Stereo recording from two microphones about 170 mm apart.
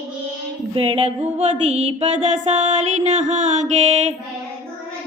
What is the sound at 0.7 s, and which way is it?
Music, 35° right (ahead or behind).